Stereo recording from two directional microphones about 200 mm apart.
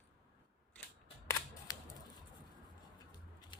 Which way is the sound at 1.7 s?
20° left (ahead or behind).